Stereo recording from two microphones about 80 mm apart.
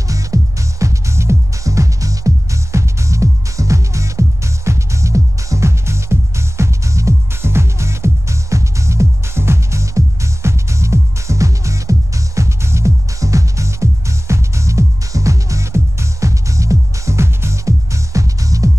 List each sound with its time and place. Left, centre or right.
0.1 s music: right